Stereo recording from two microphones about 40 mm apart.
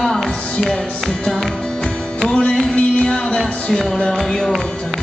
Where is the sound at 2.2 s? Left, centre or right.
Centre.